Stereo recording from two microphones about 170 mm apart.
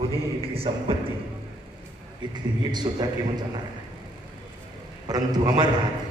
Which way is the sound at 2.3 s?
25° right (ahead or behind).